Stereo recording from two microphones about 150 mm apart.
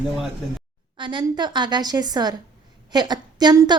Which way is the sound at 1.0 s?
30° right (ahead or behind).